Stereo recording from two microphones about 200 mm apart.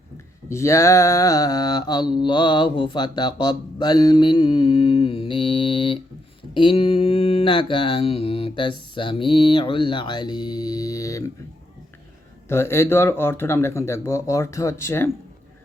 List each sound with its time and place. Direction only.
0.5 s mantra: 15° left (ahead or behind)
12.5 s speech: 15° left (ahead or behind)